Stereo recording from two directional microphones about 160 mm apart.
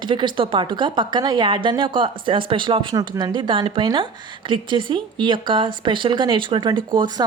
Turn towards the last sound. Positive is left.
turn(degrees=-25)  # may be behind; listen again after turning